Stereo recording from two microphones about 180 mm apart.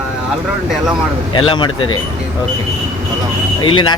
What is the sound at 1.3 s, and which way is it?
Speech, 25° left (ahead or behind).